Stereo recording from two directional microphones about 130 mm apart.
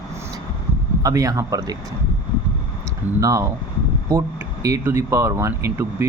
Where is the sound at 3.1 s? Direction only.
25° right (ahead or behind).